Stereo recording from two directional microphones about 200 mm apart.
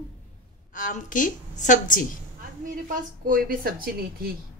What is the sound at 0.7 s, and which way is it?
A woman's voice, 40° left (ahead or behind).